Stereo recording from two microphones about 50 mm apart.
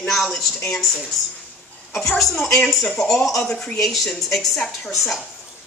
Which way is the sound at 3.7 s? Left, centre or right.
Centre.